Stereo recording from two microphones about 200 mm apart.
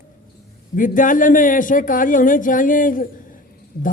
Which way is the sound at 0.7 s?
40° left (ahead or behind).